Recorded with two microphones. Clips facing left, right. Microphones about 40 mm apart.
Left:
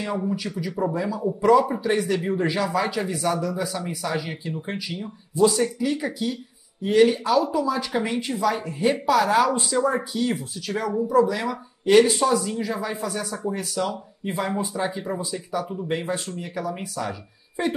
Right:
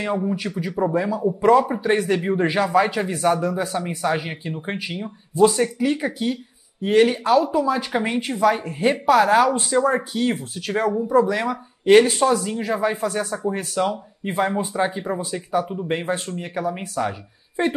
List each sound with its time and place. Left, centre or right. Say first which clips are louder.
0.9 s speech: right 4 dB; right
12.0 s speech: right 1 dB; centre
12.4 s speech: right 5 dB; right